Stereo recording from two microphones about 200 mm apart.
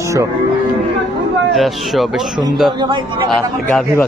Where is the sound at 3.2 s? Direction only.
Centre (ahead or behind).